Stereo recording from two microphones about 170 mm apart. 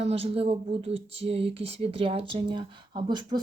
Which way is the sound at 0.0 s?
35° right (ahead or behind).